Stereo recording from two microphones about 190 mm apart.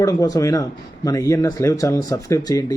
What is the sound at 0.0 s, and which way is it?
Speech, 20° left (ahead or behind).